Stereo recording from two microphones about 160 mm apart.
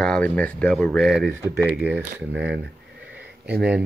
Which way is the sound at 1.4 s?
15° right (ahead or behind).